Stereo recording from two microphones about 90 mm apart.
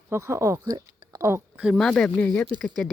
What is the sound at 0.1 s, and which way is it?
Speech, 30° right (ahead or behind).